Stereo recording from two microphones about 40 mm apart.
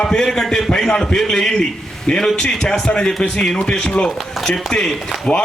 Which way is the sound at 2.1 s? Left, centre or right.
Left.